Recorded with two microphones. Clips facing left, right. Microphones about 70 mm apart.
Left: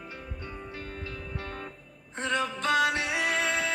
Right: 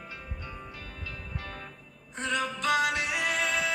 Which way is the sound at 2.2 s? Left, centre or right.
Left.